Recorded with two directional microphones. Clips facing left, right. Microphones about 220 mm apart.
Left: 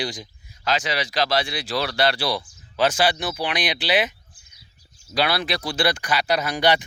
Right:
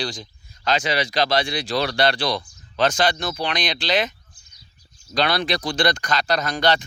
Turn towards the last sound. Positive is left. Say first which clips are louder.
# even
turn(degrees=15)  # may be behind; listen again after turning